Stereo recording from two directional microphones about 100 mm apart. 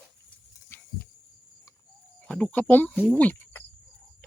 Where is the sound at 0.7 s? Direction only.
25° left (ahead or behind).